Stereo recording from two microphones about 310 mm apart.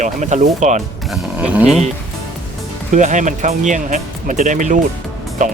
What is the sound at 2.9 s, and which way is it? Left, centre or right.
Speech, right.